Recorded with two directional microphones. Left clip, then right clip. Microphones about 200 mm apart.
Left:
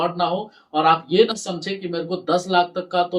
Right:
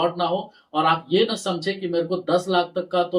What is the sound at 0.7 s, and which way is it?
Speech, 15° left (ahead or behind).